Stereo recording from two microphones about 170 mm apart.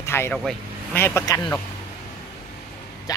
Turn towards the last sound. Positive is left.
turn(degrees=20)  # may be behind; listen again after turning